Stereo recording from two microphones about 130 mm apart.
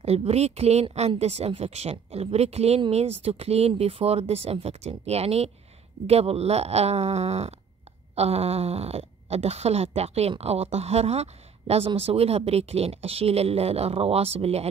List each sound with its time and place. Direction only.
0.0 s speech: 55° right (ahead or behind)